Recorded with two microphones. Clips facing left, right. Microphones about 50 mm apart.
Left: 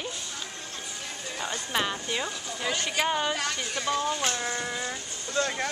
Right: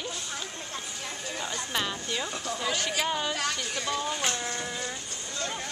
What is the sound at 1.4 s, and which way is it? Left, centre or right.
Speech, centre.